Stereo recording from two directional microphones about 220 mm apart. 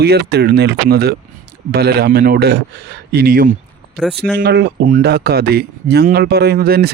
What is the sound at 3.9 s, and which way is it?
Speech, centre (ahead or behind).